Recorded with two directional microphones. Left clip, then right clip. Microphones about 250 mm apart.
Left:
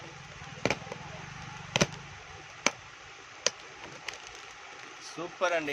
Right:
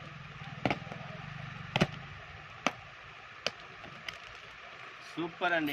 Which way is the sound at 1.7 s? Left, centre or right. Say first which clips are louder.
Left 3 dB; left.